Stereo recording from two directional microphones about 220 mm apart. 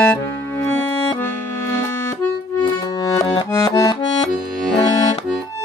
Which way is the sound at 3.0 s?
15° left (ahead or behind).